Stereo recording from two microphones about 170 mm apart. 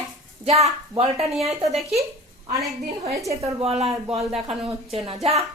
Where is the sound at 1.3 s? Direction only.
Centre (ahead or behind).